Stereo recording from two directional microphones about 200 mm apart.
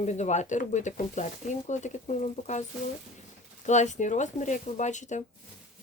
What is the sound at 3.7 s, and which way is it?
Speech, 35° left (ahead or behind).